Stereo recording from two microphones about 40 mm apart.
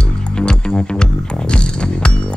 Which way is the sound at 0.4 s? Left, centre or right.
Left.